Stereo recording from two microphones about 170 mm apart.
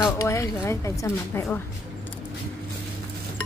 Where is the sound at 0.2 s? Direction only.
15° left (ahead or behind).